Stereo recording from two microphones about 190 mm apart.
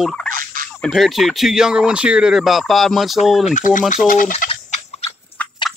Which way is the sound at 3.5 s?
45° left (ahead or behind).